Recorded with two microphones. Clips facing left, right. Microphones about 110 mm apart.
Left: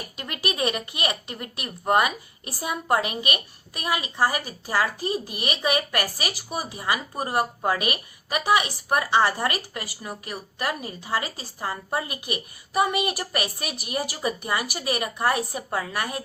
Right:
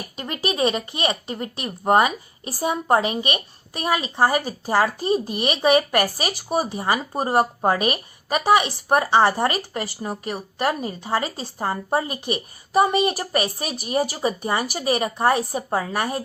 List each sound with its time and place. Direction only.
0.2 s speech: 30° right (ahead or behind)